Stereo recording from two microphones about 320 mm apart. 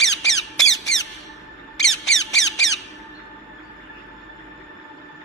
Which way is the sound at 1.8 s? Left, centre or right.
Centre.